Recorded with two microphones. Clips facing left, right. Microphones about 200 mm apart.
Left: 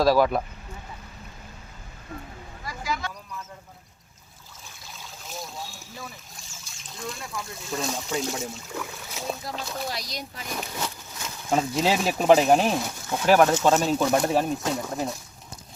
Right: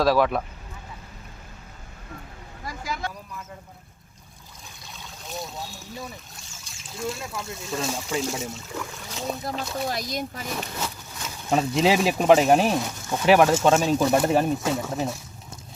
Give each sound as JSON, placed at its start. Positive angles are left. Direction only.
{"t": 0.0, "sound": "speech", "side_deg": 0}
{"t": 2.6, "sound": "a sound", "side_deg": -50}
{"t": 4.9, "sound": "boat", "side_deg": 0}
{"t": 7.7, "sound": "speech", "side_deg": -5}
{"t": 9.9, "sound": "speech", "side_deg": -50}
{"t": 10.5, "sound": "speech", "side_deg": -5}